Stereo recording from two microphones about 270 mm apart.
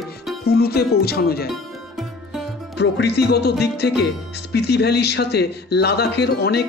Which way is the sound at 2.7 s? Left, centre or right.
Left.